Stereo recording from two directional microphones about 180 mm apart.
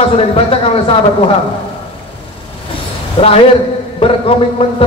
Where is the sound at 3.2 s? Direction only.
30° left (ahead or behind).